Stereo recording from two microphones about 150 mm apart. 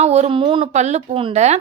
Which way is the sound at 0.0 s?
45° right (ahead or behind).